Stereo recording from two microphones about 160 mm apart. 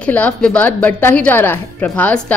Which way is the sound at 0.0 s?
5° left (ahead or behind).